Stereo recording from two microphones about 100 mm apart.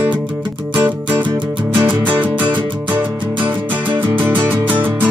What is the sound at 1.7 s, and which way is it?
Music, 55° right (ahead or behind).